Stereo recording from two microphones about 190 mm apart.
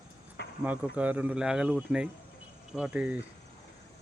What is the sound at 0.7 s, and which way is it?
Speech, 10° right (ahead or behind).